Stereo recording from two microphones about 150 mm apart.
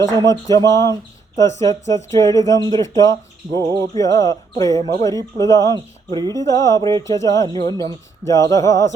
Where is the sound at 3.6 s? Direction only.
25° right (ahead or behind).